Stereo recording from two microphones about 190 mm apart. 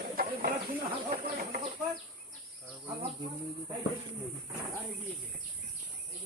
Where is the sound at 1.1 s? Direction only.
50° right (ahead or behind).